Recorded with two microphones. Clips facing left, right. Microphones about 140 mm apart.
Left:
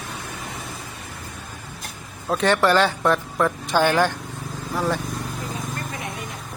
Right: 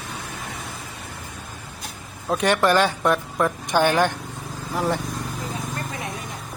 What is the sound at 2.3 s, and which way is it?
Speech, 15° right (ahead or behind).